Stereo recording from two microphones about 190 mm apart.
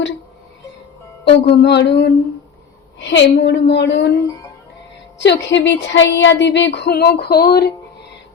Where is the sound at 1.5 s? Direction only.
65° left (ahead or behind).